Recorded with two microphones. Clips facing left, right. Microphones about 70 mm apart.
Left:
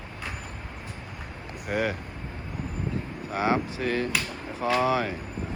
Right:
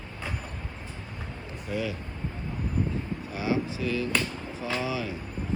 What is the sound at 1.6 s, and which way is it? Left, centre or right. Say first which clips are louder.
Speech: left 4 dB; left.